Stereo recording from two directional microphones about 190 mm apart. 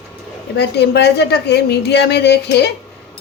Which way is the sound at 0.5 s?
60° left (ahead or behind).